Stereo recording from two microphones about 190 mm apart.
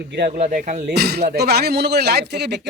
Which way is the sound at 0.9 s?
60° right (ahead or behind).